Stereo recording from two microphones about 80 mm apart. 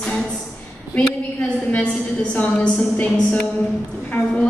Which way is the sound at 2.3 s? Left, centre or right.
Centre.